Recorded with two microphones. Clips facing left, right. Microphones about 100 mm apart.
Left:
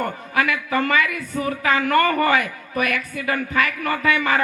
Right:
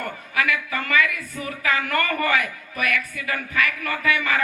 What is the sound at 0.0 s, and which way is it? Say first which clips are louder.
A woman's voice: left 4 dB; 35° left (ahead or behind).